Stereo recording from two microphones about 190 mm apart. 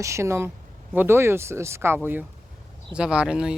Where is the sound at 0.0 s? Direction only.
15° right (ahead or behind).